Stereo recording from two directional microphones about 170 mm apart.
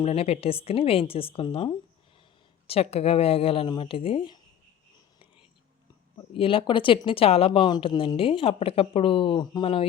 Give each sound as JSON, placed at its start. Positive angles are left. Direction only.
{"t": 0.0, "sound": "speech", "side_deg": 35}
{"t": 6.1, "sound": "speech", "side_deg": 30}